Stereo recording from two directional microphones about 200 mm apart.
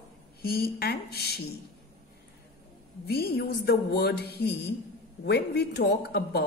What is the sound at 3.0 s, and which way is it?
Speech, 50° left (ahead or behind).